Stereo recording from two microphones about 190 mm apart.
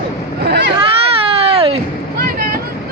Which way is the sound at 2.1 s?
50° right (ahead or behind).